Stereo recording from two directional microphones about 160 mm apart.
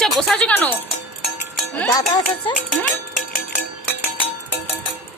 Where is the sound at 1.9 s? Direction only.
25° left (ahead or behind).